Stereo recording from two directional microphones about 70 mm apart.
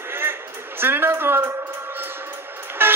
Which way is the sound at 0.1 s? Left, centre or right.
Right.